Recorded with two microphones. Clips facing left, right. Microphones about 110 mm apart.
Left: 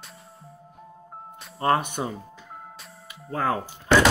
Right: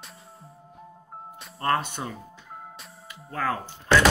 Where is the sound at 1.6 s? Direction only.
15° left (ahead or behind).